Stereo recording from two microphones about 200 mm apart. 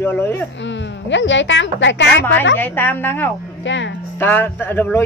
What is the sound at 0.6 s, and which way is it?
A woman's voice, 65° left (ahead or behind).